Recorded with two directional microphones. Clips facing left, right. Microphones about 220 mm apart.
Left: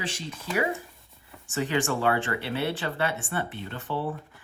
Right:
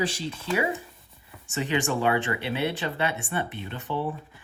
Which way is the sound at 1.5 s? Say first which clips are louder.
Even; 20° right (ahead or behind).